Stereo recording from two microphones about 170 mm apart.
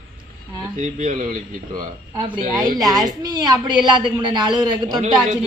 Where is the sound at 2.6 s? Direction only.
20° right (ahead or behind).